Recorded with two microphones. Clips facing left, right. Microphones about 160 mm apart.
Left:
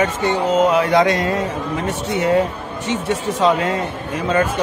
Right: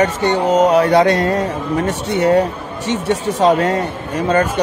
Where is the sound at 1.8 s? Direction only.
80° right.